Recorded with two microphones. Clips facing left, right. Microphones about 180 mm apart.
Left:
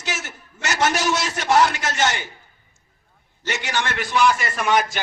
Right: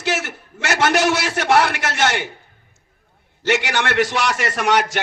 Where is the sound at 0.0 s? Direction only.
65° right (ahead or behind).